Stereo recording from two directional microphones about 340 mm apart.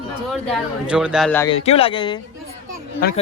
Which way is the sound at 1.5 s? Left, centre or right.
Centre.